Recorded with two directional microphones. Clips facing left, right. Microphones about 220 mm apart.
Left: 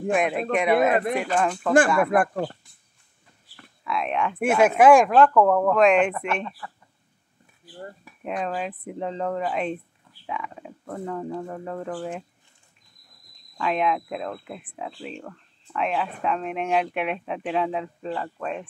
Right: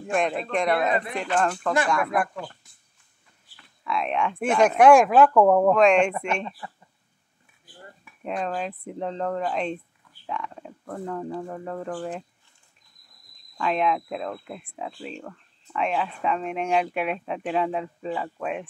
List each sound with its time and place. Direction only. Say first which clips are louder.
0.1 s speech: left 2 dB; 5° left (ahead or behind)
2.1 s speech: left 5 dB; 40° left (ahead or behind)
3.8 s speech: even; centre (ahead or behind); by 5.8 s 15° right (ahead or behind)
5.8 s speech: even; centre (ahead or behind)
6.6 s speech: even; 20° right (ahead or behind)
8.2 s speech: even; 5° left (ahead or behind)
13.6 s speech: even; centre (ahead or behind)